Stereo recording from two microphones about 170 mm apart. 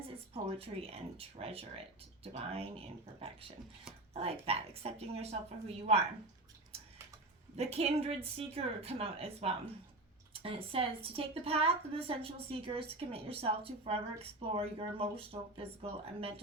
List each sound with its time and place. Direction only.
0.4 s a woman's voice: 35° right (ahead or behind)
6.7 s tick-tock: 35° right (ahead or behind)
7.5 s a woman's voice: 35° right (ahead or behind)